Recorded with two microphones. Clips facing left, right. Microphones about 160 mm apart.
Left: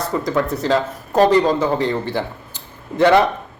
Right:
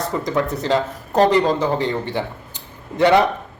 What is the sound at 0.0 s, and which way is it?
Speech, 20° right (ahead or behind).